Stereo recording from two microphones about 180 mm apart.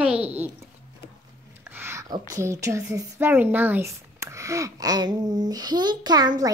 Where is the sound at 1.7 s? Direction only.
15° right (ahead or behind).